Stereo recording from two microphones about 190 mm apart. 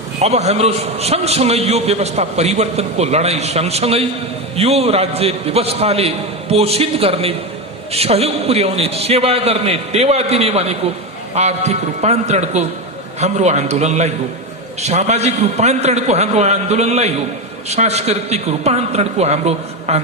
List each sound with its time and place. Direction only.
0.2 s a man's voice: 35° right (ahead or behind)